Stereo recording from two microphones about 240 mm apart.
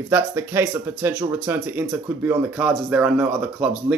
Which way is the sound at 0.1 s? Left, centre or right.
Centre.